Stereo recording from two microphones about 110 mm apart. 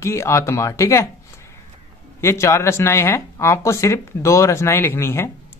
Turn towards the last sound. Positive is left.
turn(degrees=25)  # may be behind; listen again after turning